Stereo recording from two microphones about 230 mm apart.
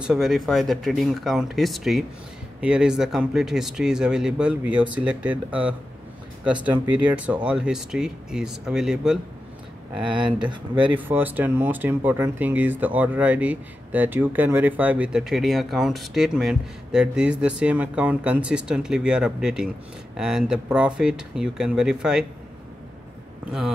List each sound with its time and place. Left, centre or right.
0.0 s speech: centre
10.5 s speech: centre
11.0 s speech: centre